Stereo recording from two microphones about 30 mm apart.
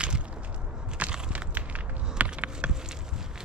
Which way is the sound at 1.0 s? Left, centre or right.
Right.